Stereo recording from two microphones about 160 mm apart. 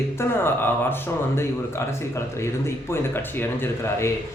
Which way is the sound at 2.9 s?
15° left (ahead or behind).